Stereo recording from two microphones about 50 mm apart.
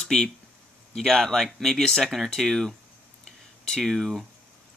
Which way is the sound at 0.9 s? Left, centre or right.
Centre.